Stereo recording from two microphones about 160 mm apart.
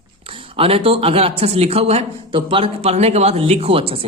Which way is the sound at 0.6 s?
35° right (ahead or behind).